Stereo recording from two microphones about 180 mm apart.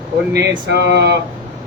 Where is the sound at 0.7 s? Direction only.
70° right (ahead or behind).